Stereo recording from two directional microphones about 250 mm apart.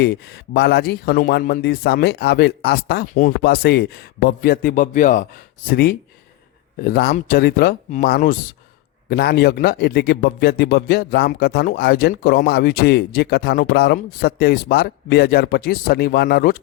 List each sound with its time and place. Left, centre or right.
0.0 s a man's voice: left